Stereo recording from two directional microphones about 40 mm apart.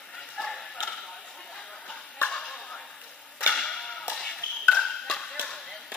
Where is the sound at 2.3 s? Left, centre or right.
Left.